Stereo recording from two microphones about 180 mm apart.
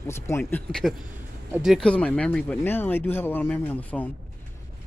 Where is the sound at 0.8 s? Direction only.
Centre (ahead or behind).